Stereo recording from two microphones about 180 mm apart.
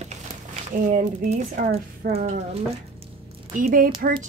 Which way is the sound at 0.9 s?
40° right (ahead or behind).